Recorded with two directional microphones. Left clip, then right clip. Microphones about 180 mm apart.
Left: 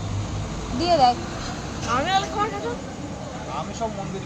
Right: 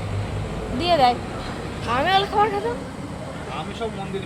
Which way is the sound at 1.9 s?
45° right (ahead or behind).